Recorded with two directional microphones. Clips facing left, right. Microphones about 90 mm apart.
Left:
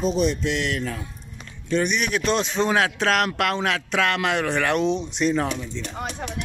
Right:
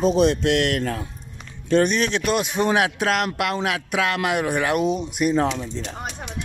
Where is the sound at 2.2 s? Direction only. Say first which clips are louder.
Right 1 dB; 10° right (ahead or behind).